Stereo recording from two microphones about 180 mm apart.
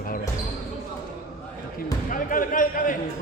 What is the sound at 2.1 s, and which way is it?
Speech, 50° left (ahead or behind).